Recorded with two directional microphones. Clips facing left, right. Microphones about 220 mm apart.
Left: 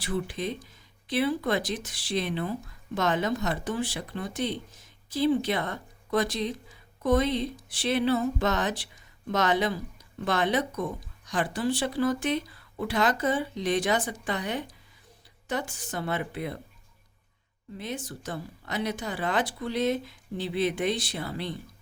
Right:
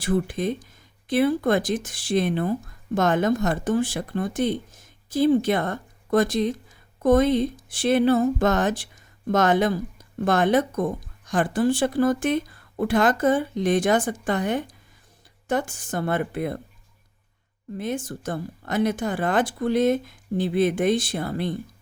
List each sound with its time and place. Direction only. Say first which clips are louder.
0.0 s speech: right 7 dB; 50° right (ahead or behind)
17.7 s speech: right 7 dB; 50° right (ahead or behind)